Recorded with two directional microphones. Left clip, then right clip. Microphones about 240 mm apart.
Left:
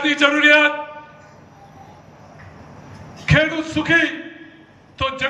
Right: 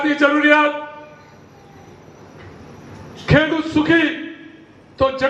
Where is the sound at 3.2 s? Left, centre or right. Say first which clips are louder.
Right 1 dB; centre.